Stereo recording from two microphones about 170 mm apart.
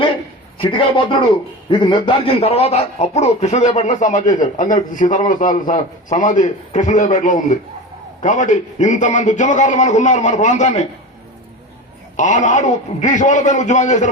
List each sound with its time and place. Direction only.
0.6 s a man's voice: 30° left (ahead or behind)
12.1 s a man's voice: 45° left (ahead or behind)